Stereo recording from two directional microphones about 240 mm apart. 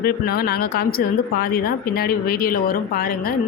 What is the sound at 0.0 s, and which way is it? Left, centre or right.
Speech, left.